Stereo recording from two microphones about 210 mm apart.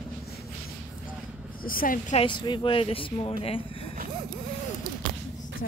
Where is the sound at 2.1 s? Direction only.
25° left (ahead or behind).